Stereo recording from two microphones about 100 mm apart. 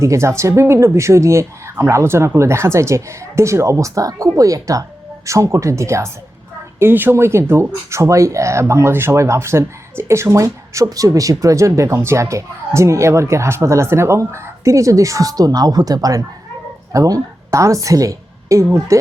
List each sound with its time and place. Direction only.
0.0 s a woman's voice: 30° right (ahead or behind)